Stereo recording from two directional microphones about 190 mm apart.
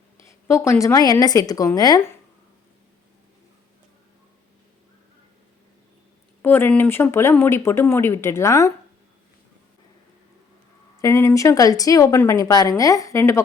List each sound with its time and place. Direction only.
0.3 s speech: 15° left (ahead or behind)
6.4 s speech: 10° left (ahead or behind)
11.0 s speech: 15° left (ahead or behind)